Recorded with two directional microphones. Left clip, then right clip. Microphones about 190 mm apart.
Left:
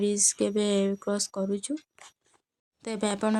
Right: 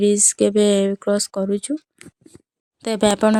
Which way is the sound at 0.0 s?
45° right (ahead or behind).